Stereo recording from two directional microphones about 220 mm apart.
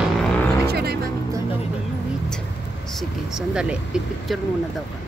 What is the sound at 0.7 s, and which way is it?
Music, 45° right (ahead or behind).